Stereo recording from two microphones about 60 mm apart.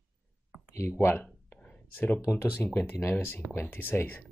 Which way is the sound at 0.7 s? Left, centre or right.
Left.